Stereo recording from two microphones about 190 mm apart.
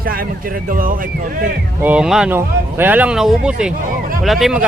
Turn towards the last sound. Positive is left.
turn(degrees=0)  # may be behind; listen again after turning